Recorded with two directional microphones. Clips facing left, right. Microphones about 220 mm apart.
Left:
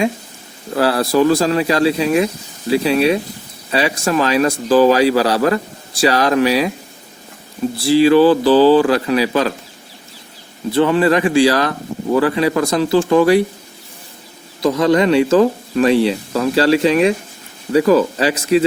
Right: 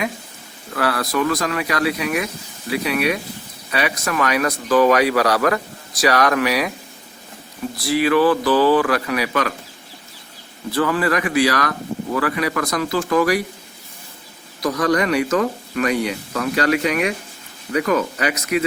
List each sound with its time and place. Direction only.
0.7 s speech: 30° left (ahead or behind)
7.8 s speech: 30° left (ahead or behind)
10.7 s speech: 25° left (ahead or behind)
14.6 s speech: 25° left (ahead or behind)